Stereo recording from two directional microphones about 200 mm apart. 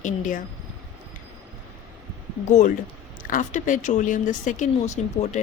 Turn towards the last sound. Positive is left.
turn(degrees=35)  # may be behind; listen again after turning